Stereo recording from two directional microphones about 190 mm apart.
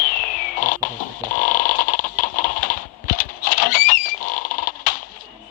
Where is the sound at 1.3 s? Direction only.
45° left (ahead or behind).